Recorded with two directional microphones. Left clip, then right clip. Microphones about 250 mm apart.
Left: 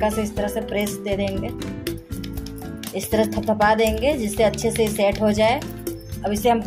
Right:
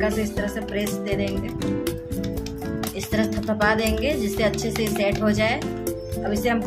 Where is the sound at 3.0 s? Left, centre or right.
Centre.